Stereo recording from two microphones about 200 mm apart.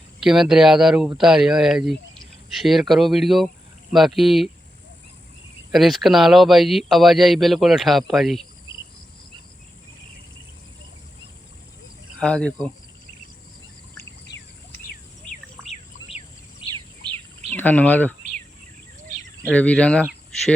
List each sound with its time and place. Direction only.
0.2 s speech: centre (ahead or behind)
5.7 s speech: centre (ahead or behind)
12.2 s speech: 5° left (ahead or behind)
16.6 s bird: 25° left (ahead or behind)
17.5 s speech: 10° left (ahead or behind)
19.5 s speech: 5° left (ahead or behind)